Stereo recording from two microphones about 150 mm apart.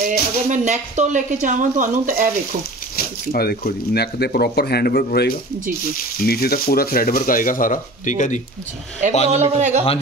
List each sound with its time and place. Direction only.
0.0 s speech: 55° right (ahead or behind)
3.0 s speech: 90° left; by 8.4 s 55° left (ahead or behind)
9.3 s speech: 50° right (ahead or behind)